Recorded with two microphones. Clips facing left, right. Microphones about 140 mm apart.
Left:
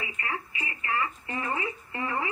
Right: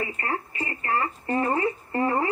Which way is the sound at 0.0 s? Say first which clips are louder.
Right 6 dB; 45° right (ahead or behind).